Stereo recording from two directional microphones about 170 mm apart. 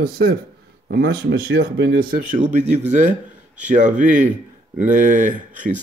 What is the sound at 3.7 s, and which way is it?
Speech, 50° right (ahead or behind).